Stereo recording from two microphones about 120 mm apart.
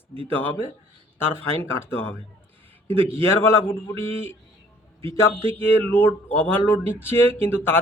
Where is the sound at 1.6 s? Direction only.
15° left (ahead or behind).